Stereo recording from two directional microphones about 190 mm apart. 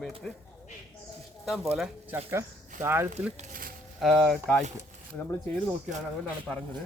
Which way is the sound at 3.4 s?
45° right (ahead or behind).